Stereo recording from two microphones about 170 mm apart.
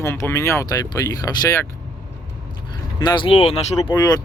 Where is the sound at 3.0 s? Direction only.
25° left (ahead or behind).